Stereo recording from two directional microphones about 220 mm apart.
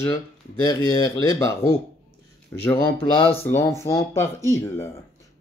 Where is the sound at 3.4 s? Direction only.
10° left (ahead or behind).